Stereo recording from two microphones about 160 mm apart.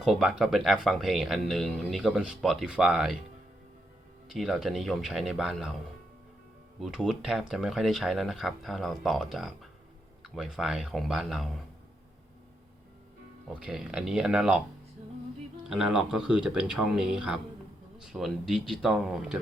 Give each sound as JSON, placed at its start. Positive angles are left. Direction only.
{"t": 0.0, "sound": "speech", "side_deg": 0}
{"t": 4.3, "sound": "speech", "side_deg": 0}
{"t": 6.7, "sound": "speech", "side_deg": 0}
{"t": 13.5, "sound": "speech", "side_deg": -5}
{"t": 15.7, "sound": "speech", "side_deg": 0}